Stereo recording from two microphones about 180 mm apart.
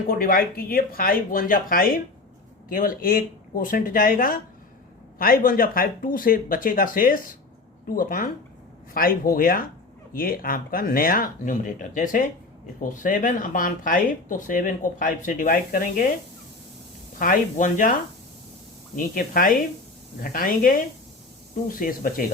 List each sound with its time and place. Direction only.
0.1 s speech: 55° left (ahead or behind)
17.2 s speech: 50° left (ahead or behind)
18.9 s speech: 50° left (ahead or behind)